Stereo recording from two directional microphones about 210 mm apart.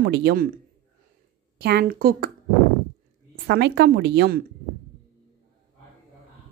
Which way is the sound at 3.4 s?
55° right (ahead or behind).